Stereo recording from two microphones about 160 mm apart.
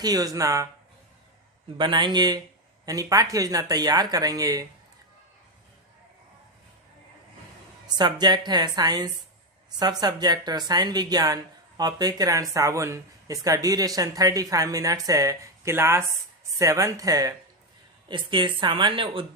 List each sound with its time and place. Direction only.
0.0 s speech: 25° right (ahead or behind)
1.8 s speech: 30° right (ahead or behind)
7.9 s speech: 25° right (ahead or behind)